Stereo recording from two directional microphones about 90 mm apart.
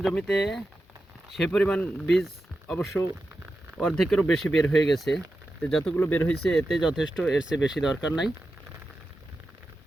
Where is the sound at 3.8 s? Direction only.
Centre (ahead or behind).